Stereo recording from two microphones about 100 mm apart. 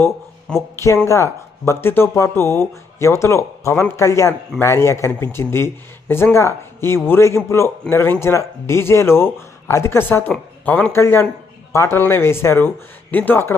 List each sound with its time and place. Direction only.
0.5 s speech: 10° left (ahead or behind)
1.0 s speech: 30° left (ahead or behind)